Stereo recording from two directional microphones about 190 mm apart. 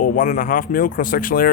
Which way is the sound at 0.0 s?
45° left (ahead or behind).